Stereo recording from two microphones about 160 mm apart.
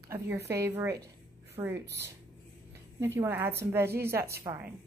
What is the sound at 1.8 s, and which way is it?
Speech, 90° right.